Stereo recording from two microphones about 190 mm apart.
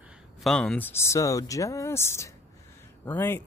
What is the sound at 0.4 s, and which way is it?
Speech, 5° left (ahead or behind).